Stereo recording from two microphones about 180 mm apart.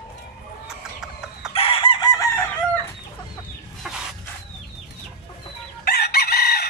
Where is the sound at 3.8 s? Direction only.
Centre (ahead or behind).